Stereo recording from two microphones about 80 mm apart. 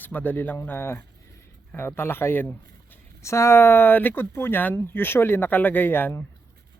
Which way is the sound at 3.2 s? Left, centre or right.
Left.